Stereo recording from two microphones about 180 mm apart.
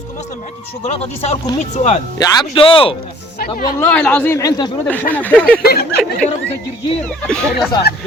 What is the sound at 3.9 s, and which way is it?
A man's voice, 5° left (ahead or behind).